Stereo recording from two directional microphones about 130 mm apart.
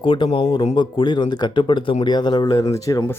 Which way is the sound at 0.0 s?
40° left (ahead or behind).